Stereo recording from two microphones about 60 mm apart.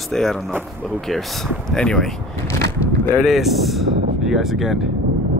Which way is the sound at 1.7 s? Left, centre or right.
Centre.